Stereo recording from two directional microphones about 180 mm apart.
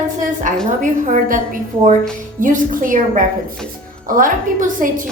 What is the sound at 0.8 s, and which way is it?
A woman's voice, 45° right (ahead or behind).